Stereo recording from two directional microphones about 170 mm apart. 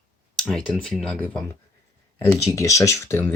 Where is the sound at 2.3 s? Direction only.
20° left (ahead or behind).